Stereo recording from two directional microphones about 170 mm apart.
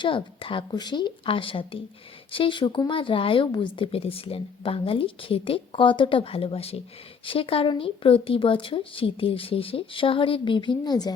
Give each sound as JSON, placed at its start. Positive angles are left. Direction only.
{"t": 0.0, "sound": "speech", "side_deg": 30}